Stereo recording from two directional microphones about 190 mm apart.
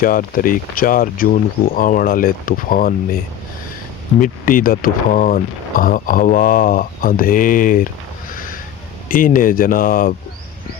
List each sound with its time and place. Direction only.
0.0 s speech: 50° left (ahead or behind)
4.2 s speech: 45° left (ahead or behind)
9.0 s speech: 45° left (ahead or behind)